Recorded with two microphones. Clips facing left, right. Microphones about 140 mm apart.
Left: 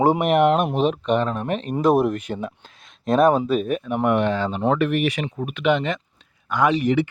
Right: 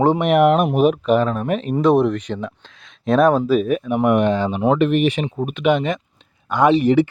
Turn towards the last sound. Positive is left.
turn(degrees=-30)  # may be behind; listen again after turning